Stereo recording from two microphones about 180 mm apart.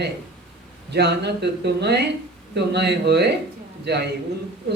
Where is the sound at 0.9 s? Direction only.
70° right (ahead or behind).